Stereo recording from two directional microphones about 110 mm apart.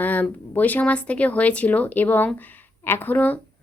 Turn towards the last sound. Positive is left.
turn(degrees=15)  # may be behind; listen again after turning